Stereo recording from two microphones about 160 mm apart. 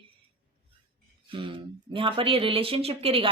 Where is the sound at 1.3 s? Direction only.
30° right (ahead or behind).